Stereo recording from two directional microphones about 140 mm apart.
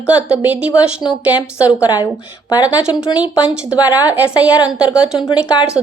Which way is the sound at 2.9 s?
30° left (ahead or behind).